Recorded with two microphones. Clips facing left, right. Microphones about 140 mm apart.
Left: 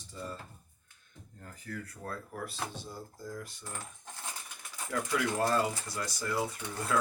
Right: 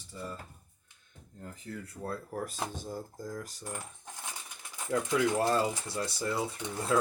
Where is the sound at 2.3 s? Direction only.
45° right (ahead or behind).